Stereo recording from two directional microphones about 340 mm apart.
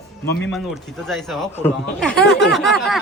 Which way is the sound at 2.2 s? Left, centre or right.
Left.